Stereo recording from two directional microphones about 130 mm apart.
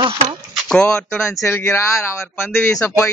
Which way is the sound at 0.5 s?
5° left (ahead or behind).